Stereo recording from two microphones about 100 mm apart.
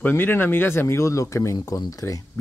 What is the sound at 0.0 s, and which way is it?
Speech, 20° left (ahead or behind).